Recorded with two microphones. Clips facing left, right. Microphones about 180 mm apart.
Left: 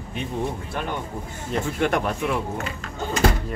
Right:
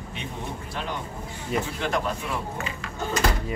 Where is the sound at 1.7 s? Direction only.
60° left (ahead or behind).